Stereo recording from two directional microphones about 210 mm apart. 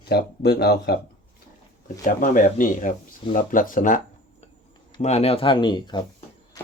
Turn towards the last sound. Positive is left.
turn(degrees=20)  # may be behind; listen again after turning